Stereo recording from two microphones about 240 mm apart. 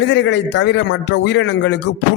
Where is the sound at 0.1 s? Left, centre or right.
Left.